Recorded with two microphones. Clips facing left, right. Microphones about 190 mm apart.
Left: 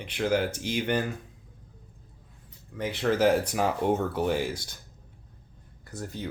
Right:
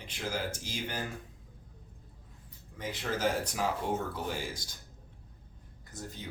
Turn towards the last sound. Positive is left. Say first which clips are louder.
# left 8 dB
turn(degrees=65)  # may be behind; listen again after turning